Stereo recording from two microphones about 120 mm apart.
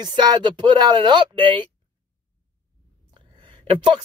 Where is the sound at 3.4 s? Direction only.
45° right (ahead or behind).